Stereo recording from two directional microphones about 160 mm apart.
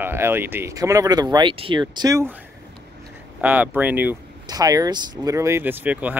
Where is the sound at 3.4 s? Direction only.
10° right (ahead or behind).